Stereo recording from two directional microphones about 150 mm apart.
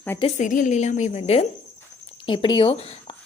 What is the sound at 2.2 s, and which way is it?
Speech, 30° left (ahead or behind).